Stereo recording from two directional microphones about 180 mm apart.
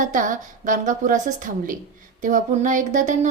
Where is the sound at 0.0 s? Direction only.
45° right (ahead or behind).